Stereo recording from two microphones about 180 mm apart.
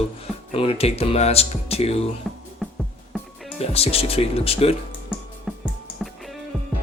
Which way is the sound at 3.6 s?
35° left (ahead or behind).